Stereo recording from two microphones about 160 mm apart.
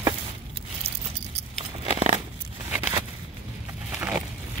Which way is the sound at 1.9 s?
40° right (ahead or behind).